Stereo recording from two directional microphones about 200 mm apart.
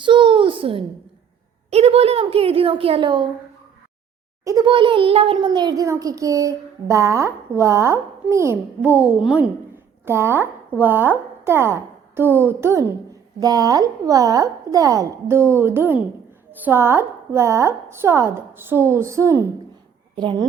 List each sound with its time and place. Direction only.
0.0 s a sound: 25° right (ahead or behind)
1.7 s a woman's voice: 30° right (ahead or behind)
4.4 s a child's voice: 20° right (ahead or behind)